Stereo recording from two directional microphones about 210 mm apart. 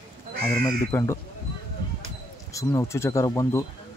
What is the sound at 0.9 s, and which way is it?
Speech, 15° left (ahead or behind).